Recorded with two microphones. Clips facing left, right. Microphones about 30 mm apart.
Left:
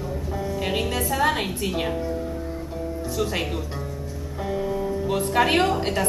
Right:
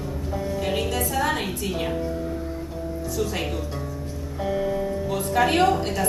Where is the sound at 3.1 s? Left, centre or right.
Left.